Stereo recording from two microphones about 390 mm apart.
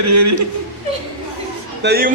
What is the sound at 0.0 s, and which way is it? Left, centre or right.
Speech, right.